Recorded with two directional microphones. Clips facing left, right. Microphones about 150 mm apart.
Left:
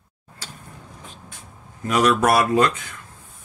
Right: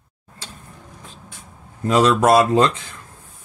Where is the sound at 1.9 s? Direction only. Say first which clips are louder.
Right 3 dB; 25° right (ahead or behind).